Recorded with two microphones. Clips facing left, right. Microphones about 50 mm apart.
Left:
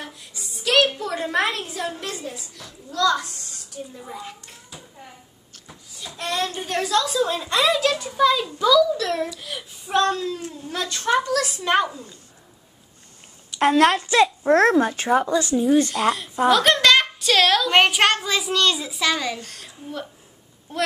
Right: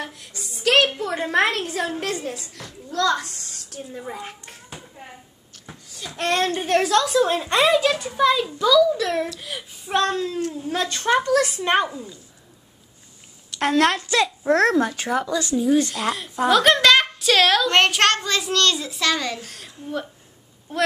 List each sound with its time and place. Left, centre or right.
0.0 s a sound: right
1.5 s a woman's voice: right
3.3 s a sound: right
4.0 s hands: right
5.7 s a child's voice: right
7.8 s speech: right
8.1 s child singing: centre
10.0 s a woman's voice: right
13.5 s a woman's voice: centre; by 15.6 s left
15.9 s a child's voice: centre